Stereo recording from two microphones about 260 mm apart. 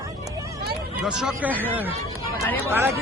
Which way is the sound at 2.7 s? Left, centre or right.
Centre.